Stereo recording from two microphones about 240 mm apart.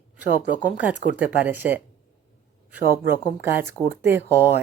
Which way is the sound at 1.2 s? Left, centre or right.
Centre.